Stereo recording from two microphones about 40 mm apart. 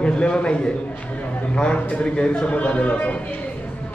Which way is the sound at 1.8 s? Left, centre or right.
Left.